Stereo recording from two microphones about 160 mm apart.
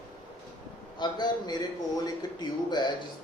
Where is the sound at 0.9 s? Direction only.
25° left (ahead or behind).